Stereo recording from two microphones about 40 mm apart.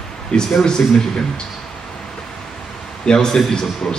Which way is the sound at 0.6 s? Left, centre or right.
Centre.